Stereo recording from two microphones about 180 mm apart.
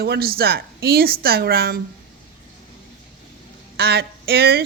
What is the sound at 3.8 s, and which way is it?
Speech, 65° right (ahead or behind).